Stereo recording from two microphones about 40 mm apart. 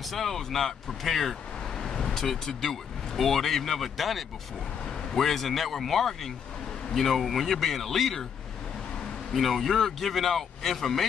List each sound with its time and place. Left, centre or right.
0.1 s a man's voice: centre
1.8 s a man's voice: centre
9.3 s a man's voice: centre